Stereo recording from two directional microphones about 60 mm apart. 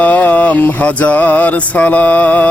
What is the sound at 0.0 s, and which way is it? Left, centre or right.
Mantra, left.